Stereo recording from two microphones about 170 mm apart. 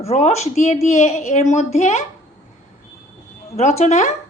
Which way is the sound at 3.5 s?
40° left (ahead or behind).